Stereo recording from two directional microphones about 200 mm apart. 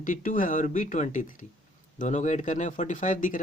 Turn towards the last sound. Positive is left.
turn(degrees=40)  # may be behind; listen again after turning